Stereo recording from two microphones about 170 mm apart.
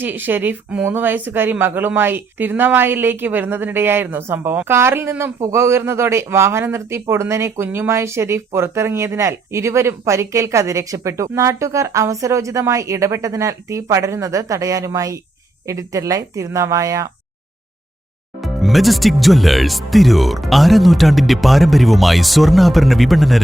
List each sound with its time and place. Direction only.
0.0 s speech: 10° right (ahead or behind)
18.4 s speech: centre (ahead or behind)